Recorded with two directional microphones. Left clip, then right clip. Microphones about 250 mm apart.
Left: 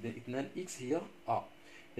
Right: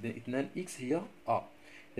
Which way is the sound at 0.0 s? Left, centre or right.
Right.